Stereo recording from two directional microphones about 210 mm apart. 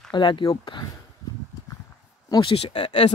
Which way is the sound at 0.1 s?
20° left (ahead or behind).